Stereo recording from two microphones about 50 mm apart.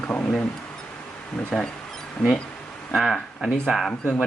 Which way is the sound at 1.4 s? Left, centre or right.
Centre.